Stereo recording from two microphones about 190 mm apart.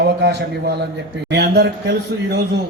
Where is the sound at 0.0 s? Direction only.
60° right (ahead or behind).